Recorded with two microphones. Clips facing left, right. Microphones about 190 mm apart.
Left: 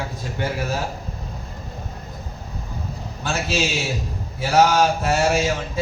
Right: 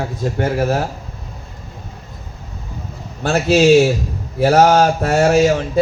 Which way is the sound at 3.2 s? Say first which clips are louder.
Right 11 dB; 55° right (ahead or behind).